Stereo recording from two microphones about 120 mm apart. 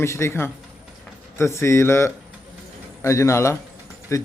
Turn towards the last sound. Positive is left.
turn(degrees=25)  # may be behind; listen again after turning